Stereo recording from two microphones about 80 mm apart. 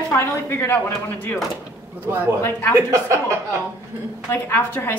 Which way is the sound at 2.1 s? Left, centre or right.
Right.